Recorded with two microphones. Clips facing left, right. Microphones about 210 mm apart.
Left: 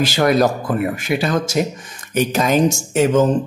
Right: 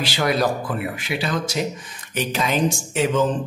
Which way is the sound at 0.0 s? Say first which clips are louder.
Left 6 dB; 45° left (ahead or behind).